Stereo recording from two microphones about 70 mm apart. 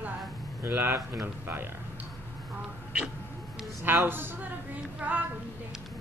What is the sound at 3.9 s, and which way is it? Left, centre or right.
A woman's voice, right.